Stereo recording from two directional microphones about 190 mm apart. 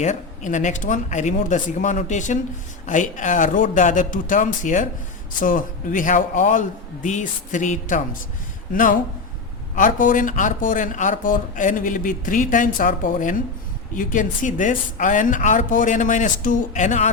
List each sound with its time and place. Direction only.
0.0 s speech: 40° left (ahead or behind)